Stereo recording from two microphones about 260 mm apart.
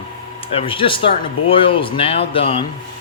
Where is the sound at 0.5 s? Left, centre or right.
Left.